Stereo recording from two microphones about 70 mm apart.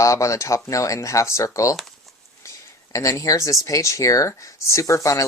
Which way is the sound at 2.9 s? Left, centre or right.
Left.